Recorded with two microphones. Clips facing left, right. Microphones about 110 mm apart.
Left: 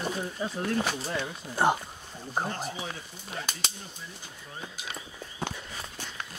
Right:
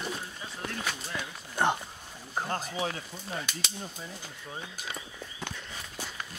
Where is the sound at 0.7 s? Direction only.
35° left (ahead or behind).